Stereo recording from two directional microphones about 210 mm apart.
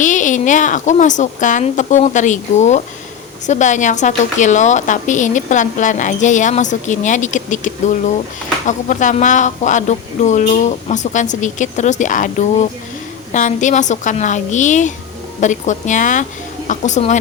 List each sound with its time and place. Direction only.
0.0 s a woman's voice: 35° left (ahead or behind)